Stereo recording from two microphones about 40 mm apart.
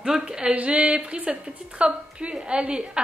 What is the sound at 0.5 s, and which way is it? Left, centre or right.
A woman's voice, right.